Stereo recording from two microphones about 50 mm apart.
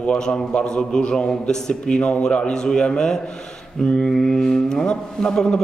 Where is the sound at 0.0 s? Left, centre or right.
Centre.